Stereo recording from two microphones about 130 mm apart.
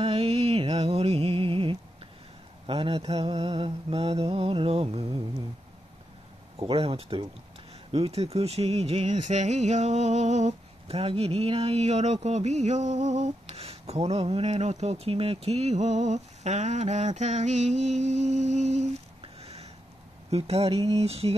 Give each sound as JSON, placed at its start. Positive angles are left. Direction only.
{"t": 0.0, "sound": "music", "side_deg": -45}
{"t": 2.6, "sound": "mantra", "side_deg": -45}
{"t": 6.7, "sound": "mantra", "side_deg": -50}
{"t": 7.9, "sound": "speech", "side_deg": -50}
{"t": 20.2, "sound": "mantra", "side_deg": -50}